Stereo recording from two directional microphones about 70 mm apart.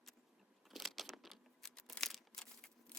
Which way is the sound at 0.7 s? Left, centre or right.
Centre.